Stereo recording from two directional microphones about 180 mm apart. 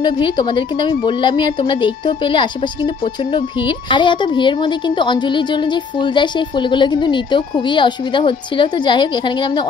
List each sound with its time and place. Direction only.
0.0 s a woman's voice: 25° left (ahead or behind)